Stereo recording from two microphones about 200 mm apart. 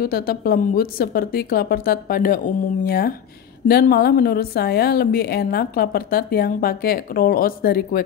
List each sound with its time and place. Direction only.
0.0 s a woman's voice: 50° left (ahead or behind)